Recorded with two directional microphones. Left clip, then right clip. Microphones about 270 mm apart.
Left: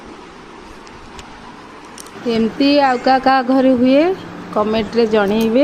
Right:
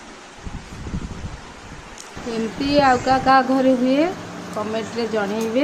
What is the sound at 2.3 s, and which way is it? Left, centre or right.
A woman's voice, left.